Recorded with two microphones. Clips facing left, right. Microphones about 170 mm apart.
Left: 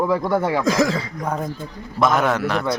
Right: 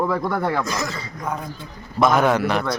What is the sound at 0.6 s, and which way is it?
Speech, 90° left.